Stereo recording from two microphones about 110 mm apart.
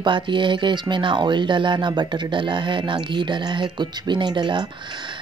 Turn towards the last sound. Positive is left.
turn(degrees=-45)  # may be behind; listen again after turning